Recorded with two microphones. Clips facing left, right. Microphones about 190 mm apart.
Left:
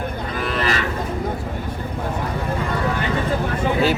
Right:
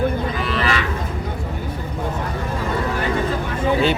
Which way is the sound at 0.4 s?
45° left (ahead or behind).